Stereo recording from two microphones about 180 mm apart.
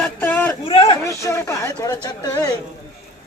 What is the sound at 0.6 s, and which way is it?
Speech, 30° left (ahead or behind).